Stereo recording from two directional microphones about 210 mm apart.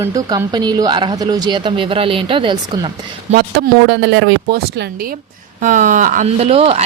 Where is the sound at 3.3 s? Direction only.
50° right (ahead or behind).